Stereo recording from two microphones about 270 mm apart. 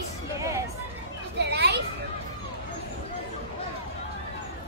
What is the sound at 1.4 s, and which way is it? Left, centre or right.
Speech, right.